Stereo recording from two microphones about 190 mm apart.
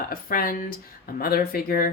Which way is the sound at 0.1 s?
50° left (ahead or behind).